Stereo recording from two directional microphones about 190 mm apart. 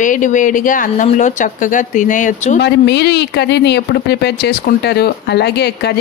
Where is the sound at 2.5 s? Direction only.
65° left (ahead or behind).